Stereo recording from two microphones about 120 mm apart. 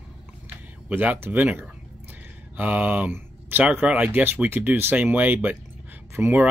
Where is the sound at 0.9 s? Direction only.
15° right (ahead or behind).